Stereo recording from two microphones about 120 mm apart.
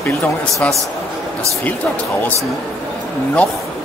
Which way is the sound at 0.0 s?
20° left (ahead or behind).